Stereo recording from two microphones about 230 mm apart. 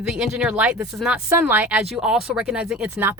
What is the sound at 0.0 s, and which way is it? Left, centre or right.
Speech, centre.